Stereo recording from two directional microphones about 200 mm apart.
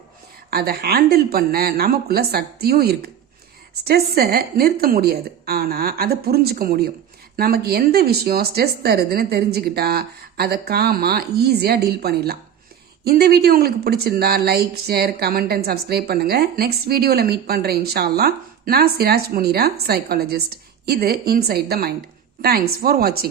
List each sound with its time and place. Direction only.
0.5 s speech: 50° right (ahead or behind)